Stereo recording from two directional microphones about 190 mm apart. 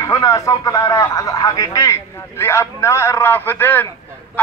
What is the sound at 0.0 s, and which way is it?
A man's voice, 15° left (ahead or behind).